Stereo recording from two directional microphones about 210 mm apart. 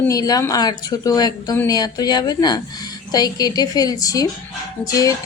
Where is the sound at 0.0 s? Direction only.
15° left (ahead or behind).